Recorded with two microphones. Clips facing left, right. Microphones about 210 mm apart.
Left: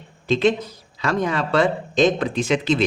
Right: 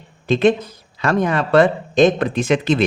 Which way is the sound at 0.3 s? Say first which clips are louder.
Right 3 dB; 55° right (ahead or behind).